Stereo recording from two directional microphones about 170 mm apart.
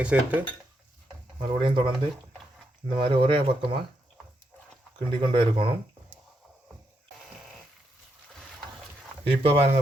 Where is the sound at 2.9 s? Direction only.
30° right (ahead or behind).